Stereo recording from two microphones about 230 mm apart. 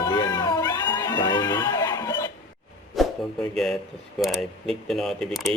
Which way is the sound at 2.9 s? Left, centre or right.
Centre.